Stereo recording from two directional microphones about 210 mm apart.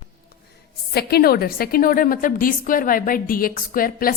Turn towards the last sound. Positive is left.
turn(degrees=45)  # may be behind; listen again after turning